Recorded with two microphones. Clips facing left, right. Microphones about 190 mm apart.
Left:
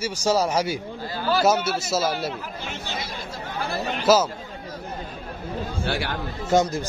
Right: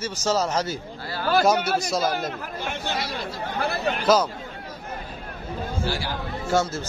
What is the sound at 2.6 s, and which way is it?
Speech, 55° right (ahead or behind).